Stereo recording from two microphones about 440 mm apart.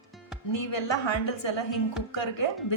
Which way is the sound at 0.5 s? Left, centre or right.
Left.